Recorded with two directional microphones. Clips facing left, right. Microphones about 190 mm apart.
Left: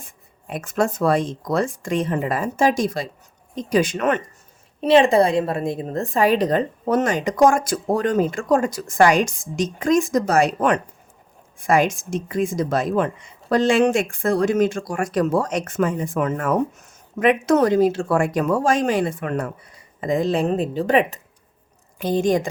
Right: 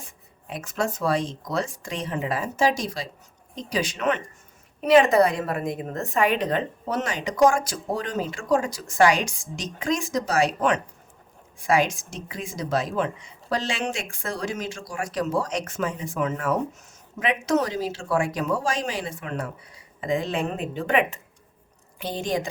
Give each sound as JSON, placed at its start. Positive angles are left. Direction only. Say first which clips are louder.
{"t": 0.0, "sound": "a woman's voice", "louder": "left 2 dB", "side_deg": 50}
{"t": 4.8, "sound": "a woman's voice", "louder": "left 2 dB", "side_deg": 30}
{"t": 20.0, "sound": "a woman's voice", "louder": "left 5 dB", "side_deg": 40}
{"t": 21.9, "sound": "a woman's voice", "louder": "left 8 dB", "side_deg": 45}